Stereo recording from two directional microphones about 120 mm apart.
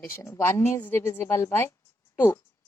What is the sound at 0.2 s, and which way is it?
A woman's voice, 20° left (ahead or behind).